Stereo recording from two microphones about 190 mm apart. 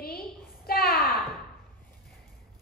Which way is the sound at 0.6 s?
50° left (ahead or behind).